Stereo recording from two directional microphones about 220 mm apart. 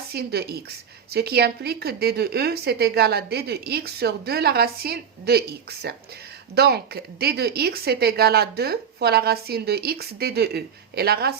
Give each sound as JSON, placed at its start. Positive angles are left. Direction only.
{"t": 0.1, "sound": "a woman's voice", "side_deg": -45}